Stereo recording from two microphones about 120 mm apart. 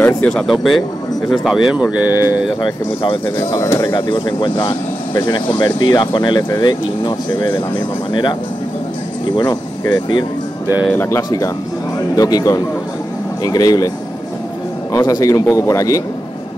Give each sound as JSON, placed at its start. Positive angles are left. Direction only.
{"t": 0.2, "sound": "speech", "side_deg": 5}
{"t": 2.1, "sound": "speech", "side_deg": 30}
{"t": 3.0, "sound": "speech", "side_deg": 45}
{"t": 3.3, "sound": "speech", "side_deg": 25}
{"t": 3.9, "sound": "speech", "side_deg": 40}
{"t": 10.9, "sound": "speech", "side_deg": 20}